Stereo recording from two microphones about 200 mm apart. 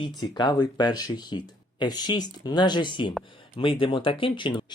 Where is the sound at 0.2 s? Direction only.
20° left (ahead or behind).